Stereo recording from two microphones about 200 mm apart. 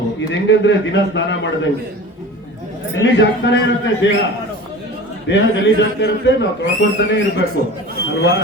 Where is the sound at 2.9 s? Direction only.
65° left (ahead or behind).